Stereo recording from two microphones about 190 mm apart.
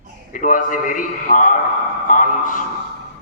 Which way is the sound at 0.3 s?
45° left (ahead or behind).